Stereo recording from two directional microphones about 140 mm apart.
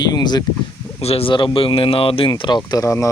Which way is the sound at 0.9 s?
45° left (ahead or behind).